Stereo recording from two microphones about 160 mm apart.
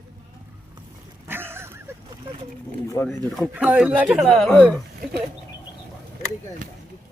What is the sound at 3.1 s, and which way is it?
Speech, centre (ahead or behind).